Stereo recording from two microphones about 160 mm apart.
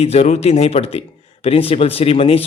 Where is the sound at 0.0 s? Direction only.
40° left (ahead or behind).